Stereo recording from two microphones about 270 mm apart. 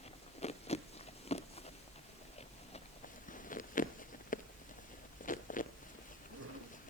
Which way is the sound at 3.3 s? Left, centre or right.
Left.